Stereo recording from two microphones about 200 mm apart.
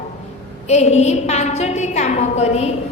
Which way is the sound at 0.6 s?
35° left (ahead or behind).